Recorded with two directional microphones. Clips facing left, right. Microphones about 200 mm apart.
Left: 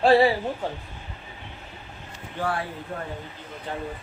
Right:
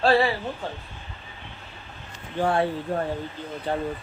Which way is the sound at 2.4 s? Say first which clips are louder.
Right 6 dB; 25° right (ahead or behind).